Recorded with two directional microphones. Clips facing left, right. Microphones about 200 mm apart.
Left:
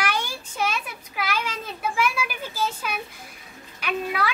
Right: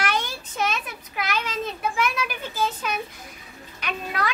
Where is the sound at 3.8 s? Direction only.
5° left (ahead or behind).